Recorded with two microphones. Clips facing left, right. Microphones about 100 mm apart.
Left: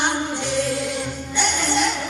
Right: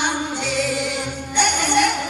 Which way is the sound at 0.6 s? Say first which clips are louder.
Even; 90° right.